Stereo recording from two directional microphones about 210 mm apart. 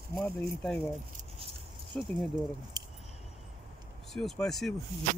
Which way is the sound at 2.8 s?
20° right (ahead or behind).